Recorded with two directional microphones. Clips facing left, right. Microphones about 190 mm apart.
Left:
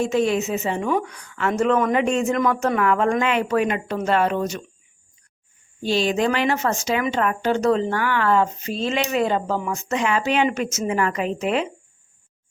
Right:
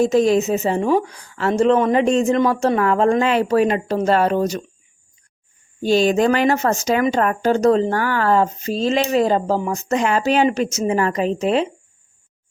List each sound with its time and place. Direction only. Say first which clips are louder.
0.0 s speech: right 5 dB; 40° right (ahead or behind)
5.8 s speech: right 5 dB; 45° right (ahead or behind)